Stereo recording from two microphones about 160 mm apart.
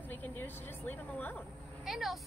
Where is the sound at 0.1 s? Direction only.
10° left (ahead or behind).